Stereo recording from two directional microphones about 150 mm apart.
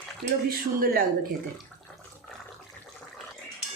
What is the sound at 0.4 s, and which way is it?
Speech, 75° right (ahead or behind).